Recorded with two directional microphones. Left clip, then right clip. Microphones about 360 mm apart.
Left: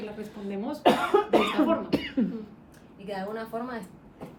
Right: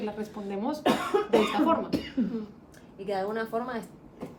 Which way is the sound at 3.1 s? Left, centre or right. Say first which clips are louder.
Right 4 dB; right.